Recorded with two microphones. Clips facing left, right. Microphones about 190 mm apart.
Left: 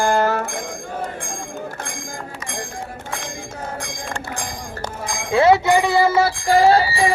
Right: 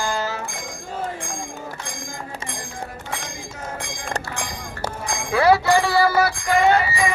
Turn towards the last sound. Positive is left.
turn(degrees=35)  # may be behind; listen again after turning